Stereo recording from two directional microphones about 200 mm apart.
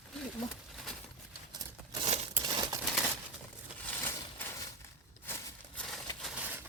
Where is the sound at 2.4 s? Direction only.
20° right (ahead or behind).